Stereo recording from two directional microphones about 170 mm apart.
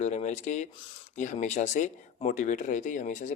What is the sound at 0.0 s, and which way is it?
Speech, 45° left (ahead or behind).